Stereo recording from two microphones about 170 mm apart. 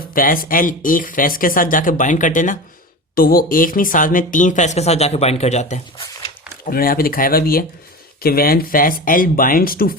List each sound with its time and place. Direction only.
0.1 s speech: 55° left (ahead or behind)
3.2 s speech: 60° left (ahead or behind); by 5.8 s 45° left (ahead or behind)
6.7 s speech: 60° left (ahead or behind)